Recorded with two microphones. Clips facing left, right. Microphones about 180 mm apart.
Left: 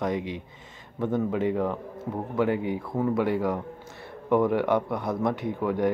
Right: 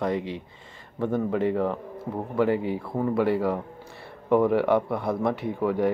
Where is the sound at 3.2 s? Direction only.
5° right (ahead or behind).